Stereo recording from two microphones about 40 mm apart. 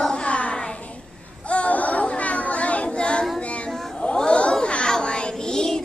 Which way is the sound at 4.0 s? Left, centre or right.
Left.